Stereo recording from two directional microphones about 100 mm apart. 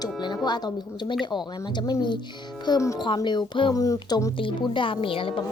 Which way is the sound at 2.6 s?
35° left (ahead or behind).